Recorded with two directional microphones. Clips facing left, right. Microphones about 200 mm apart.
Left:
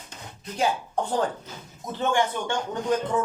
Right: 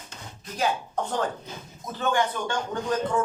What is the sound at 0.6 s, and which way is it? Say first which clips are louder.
Speech: left 1 dB; 30° left (ahead or behind).